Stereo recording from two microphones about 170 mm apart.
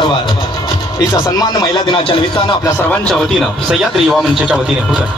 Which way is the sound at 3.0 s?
Centre (ahead or behind).